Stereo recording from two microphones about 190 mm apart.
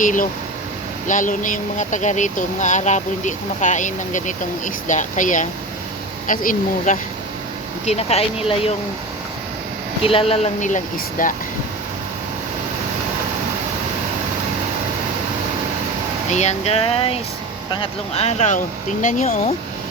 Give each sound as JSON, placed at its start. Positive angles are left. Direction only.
{"t": 0.0, "sound": "speech", "side_deg": 45}
{"t": 7.9, "sound": "speech", "side_deg": 35}
{"t": 10.0, "sound": "speech", "side_deg": 30}
{"t": 16.3, "sound": "speech", "side_deg": 35}